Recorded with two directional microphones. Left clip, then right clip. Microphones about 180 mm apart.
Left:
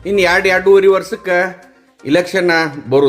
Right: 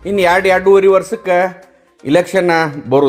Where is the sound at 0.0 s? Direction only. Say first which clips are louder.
Even; 15° right (ahead or behind).